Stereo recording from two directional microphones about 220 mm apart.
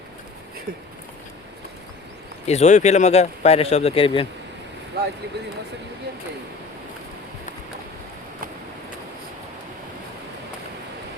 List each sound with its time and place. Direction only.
2.5 s a man's voice: 30° left (ahead or behind)
4.9 s speech: 45° right (ahead or behind)